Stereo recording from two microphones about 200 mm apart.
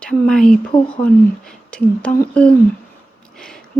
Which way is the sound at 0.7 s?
25° left (ahead or behind).